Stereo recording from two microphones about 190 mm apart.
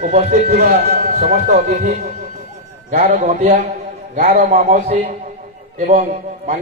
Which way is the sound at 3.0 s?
40° right (ahead or behind).